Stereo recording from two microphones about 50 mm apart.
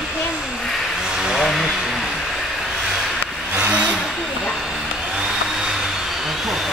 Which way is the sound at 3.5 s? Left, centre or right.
Right.